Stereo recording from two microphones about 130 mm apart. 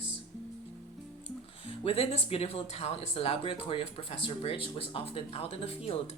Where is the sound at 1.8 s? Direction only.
50° left (ahead or behind).